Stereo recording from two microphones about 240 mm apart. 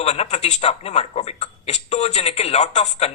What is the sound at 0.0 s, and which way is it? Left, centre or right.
A man's voice, left.